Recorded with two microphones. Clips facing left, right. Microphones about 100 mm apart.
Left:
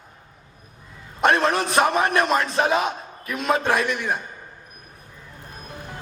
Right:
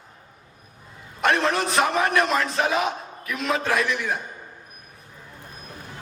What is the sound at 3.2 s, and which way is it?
Speech, 30° left (ahead or behind).